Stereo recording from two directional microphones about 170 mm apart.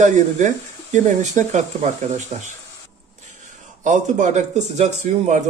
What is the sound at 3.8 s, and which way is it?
Speech, 45° right (ahead or behind).